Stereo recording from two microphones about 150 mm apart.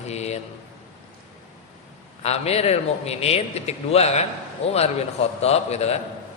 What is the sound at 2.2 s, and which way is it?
A man's voice, 45° left (ahead or behind).